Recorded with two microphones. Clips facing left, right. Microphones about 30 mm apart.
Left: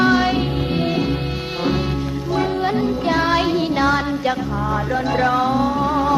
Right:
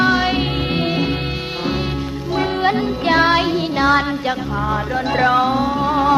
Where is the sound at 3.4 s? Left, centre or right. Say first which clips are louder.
Even; centre.